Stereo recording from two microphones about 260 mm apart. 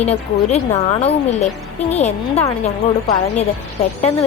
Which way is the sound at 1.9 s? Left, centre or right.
Left.